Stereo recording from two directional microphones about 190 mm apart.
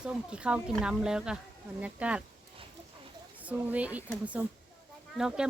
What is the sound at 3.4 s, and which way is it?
Speech, 5° right (ahead or behind).